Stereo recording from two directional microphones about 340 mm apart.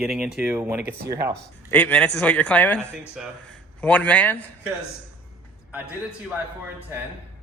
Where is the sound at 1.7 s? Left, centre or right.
Centre.